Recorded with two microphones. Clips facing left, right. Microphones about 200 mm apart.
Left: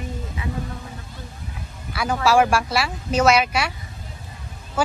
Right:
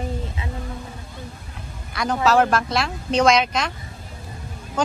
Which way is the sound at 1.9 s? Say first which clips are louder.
Even; 10° left (ahead or behind).